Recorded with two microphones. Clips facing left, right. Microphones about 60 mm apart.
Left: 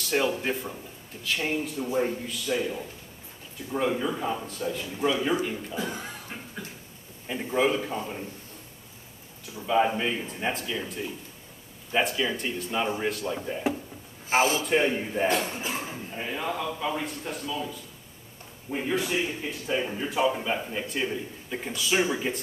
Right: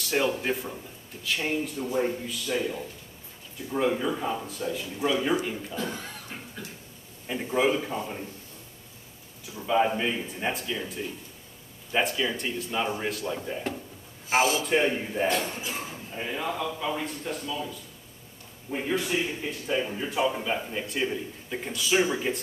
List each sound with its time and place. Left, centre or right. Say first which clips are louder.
0.0 s a man's voice: even; centre
5.8 s speech: left 1 dB; centre
7.2 s a man's voice: even; centre
9.5 s a man's voice: even; centre
14.3 s speech: even; left
14.6 s a man's voice: even; centre
15.3 s speech: left 1 dB; left
16.1 s a man's voice: right 1 dB; centre